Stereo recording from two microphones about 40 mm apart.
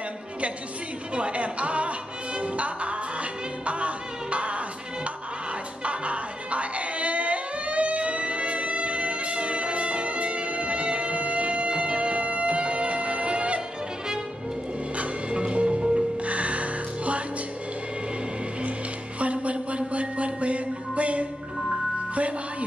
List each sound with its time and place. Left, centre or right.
1.1 s speech: right
5.9 s a sound: right
15.0 s music: right
19.1 s music: right